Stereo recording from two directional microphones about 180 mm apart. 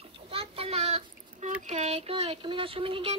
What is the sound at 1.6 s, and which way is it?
Speech, 40° right (ahead or behind).